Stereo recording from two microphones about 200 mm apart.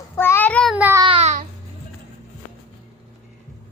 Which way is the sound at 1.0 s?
30° right (ahead or behind).